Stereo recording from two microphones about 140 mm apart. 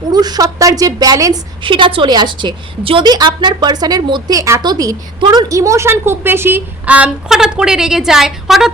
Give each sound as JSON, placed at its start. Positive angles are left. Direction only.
{"t": 0.1, "sound": "a woman's voice", "side_deg": -30}
{"t": 1.6, "sound": "a woman's voice", "side_deg": -35}